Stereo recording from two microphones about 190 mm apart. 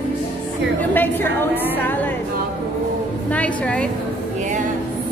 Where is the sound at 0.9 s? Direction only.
10° left (ahead or behind).